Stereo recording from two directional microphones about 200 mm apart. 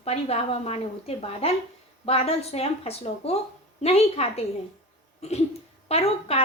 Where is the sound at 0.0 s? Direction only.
30° left (ahead or behind).